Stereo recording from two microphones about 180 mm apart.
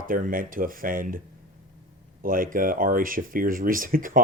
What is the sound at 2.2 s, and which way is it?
Speech, 50° right (ahead or behind).